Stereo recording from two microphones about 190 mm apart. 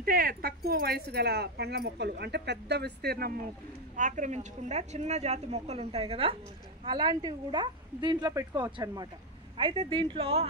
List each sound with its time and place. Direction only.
0.0 s speech: 50° right (ahead or behind)
3.9 s speech: 40° right (ahead or behind)